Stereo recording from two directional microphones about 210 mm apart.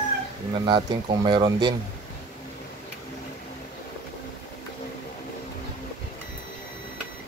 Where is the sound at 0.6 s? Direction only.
20° right (ahead or behind).